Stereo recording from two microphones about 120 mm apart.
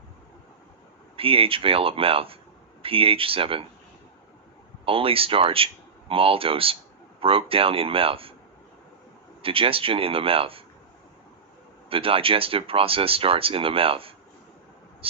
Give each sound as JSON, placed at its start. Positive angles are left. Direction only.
{"t": 1.1, "sound": "speech", "side_deg": -50}
{"t": 4.9, "sound": "speech", "side_deg": -50}
{"t": 9.4, "sound": "speech", "side_deg": -50}
{"t": 11.9, "sound": "speech", "side_deg": -50}